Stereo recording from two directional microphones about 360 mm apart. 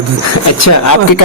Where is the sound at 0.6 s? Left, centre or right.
Left.